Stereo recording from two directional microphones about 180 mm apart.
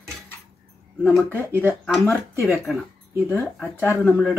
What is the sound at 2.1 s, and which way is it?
Speech, 15° left (ahead or behind).